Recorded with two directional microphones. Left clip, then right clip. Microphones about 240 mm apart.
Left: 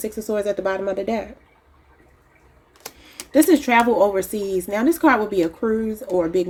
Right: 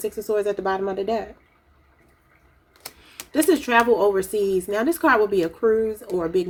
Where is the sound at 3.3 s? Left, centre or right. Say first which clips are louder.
Left 3 dB; left.